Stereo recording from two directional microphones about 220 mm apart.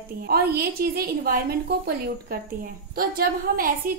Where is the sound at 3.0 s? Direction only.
40° right (ahead or behind).